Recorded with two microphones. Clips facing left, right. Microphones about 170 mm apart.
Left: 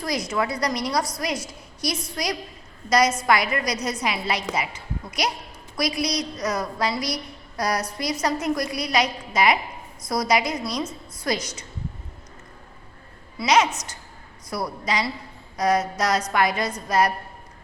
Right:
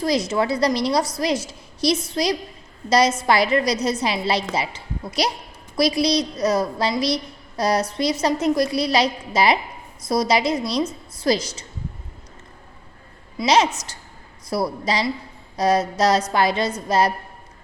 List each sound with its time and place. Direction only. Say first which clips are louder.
0.0 s a woman's voice: right 5 dB; 25° right (ahead or behind)
13.4 s a woman's voice: right 2 dB; 30° right (ahead or behind)